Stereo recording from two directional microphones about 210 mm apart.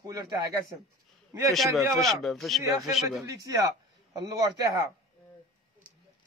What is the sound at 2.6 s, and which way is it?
A man's voice, 15° right (ahead or behind).